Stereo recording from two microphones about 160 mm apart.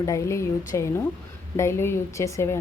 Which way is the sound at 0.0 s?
20° left (ahead or behind).